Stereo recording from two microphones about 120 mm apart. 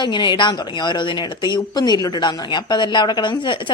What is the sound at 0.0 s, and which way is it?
Speech, 40° left (ahead or behind).